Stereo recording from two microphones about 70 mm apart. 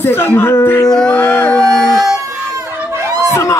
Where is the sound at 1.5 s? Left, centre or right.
Centre.